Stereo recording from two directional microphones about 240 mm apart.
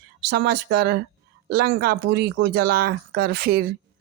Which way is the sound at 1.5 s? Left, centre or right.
Right.